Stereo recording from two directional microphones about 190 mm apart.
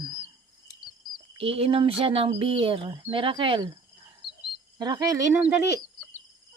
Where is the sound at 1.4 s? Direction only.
30° right (ahead or behind).